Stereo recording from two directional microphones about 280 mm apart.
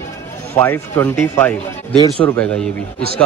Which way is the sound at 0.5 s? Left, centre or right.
Centre.